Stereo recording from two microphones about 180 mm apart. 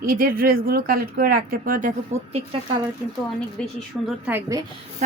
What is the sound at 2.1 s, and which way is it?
Speech, 40° right (ahead or behind).